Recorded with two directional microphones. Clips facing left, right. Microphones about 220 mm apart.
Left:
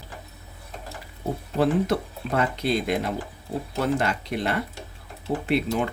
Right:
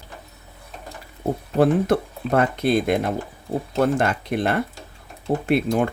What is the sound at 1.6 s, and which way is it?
Speech, 55° right (ahead or behind).